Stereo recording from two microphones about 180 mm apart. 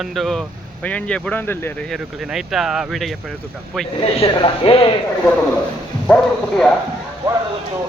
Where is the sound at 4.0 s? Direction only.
35° left (ahead or behind).